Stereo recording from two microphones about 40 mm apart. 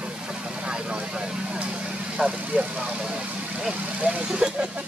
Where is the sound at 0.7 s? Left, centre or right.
Right.